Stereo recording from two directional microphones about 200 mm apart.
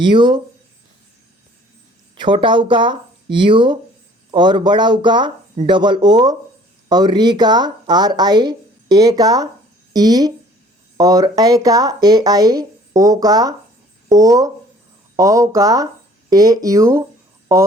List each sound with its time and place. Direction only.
0.0 s speech: 25° right (ahead or behind)
2.1 s speech: 25° right (ahead or behind)